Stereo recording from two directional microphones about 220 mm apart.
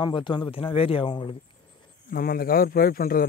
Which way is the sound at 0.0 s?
20° left (ahead or behind).